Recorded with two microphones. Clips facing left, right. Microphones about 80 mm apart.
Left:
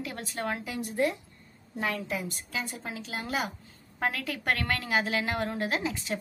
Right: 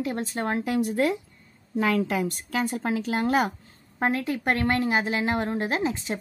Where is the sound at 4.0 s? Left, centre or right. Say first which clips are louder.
Right 6 dB; right.